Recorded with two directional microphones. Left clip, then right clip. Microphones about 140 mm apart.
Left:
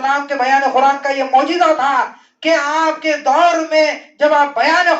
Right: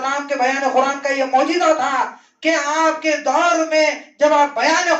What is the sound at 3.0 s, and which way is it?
A man's voice, 20° left (ahead or behind).